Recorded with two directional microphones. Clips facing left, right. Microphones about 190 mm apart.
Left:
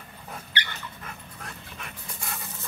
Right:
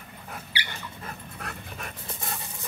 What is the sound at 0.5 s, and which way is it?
Dog, 10° right (ahead or behind).